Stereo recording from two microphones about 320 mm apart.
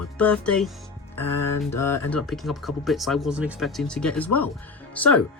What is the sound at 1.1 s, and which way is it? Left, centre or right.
Speech, left.